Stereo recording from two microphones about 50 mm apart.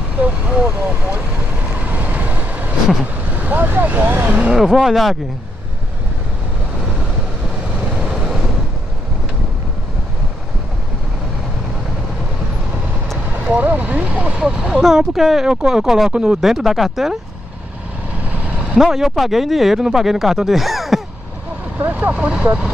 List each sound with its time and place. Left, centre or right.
0.2 s vehicle: right
3.3 s speech: right
4.5 s speech: centre
8.1 s vehicle: centre
13.4 s speech: right
14.3 s speech: centre
16.1 s speech: right
16.3 s speech: centre
18.8 s speech: centre
21.9 s speech: right